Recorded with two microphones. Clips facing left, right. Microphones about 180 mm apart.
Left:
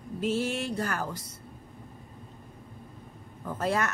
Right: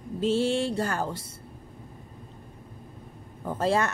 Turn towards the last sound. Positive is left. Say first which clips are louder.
# right 4 dB
turn(degrees=-30)  # may be behind; listen again after turning